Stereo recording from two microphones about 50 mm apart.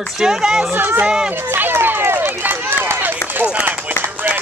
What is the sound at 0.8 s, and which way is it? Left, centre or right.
Speech, right.